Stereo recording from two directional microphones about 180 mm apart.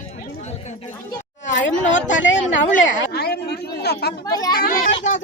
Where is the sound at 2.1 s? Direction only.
90° left.